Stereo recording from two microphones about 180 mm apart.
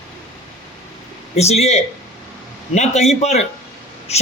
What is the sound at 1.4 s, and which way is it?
A man's voice, 35° left (ahead or behind).